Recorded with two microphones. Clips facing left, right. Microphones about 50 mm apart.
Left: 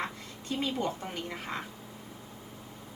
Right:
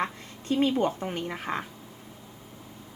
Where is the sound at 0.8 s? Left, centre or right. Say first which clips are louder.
Right 6 dB; right.